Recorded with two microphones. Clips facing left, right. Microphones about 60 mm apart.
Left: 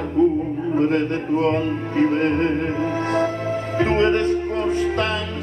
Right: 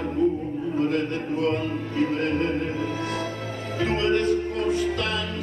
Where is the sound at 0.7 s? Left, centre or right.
Left.